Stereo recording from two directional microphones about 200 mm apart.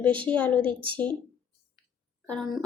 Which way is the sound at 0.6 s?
25° right (ahead or behind).